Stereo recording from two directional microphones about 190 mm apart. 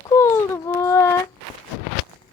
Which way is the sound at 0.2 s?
15° left (ahead or behind).